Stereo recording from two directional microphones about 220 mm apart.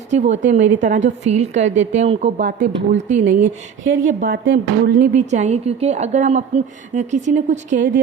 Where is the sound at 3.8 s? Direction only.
60° right (ahead or behind).